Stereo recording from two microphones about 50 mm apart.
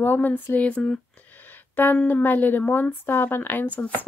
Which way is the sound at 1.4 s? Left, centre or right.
Left.